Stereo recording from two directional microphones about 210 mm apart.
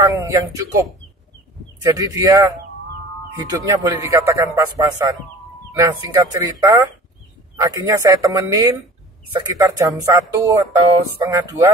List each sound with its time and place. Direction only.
0.1 s speech: 15° right (ahead or behind)